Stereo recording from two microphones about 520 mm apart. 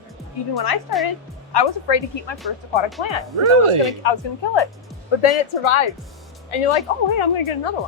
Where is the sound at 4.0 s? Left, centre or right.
Left.